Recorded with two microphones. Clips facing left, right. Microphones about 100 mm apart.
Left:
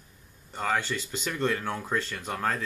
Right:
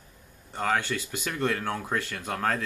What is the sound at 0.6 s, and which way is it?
Speech, 15° right (ahead or behind).